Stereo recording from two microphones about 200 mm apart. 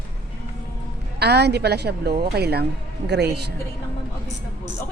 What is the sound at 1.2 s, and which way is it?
A woman's voice, 55° right (ahead or behind).